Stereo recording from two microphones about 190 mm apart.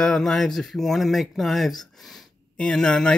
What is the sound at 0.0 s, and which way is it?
Speech, centre (ahead or behind).